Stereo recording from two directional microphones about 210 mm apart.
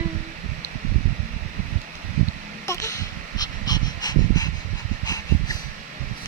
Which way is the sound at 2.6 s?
15° left (ahead or behind).